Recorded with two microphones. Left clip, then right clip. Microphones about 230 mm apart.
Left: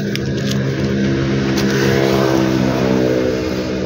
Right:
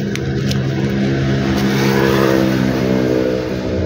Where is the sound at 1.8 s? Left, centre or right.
Right.